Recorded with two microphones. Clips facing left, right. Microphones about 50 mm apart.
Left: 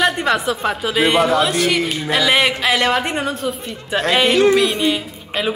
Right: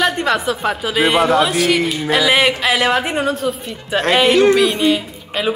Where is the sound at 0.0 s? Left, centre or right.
Centre.